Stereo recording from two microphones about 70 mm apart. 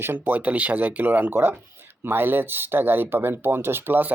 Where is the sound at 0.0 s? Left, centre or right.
Right.